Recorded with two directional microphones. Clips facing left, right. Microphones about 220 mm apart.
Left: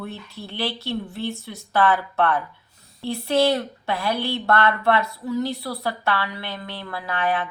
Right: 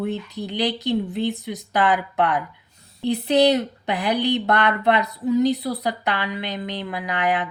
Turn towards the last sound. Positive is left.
turn(degrees=-15)  # may be behind; listen again after turning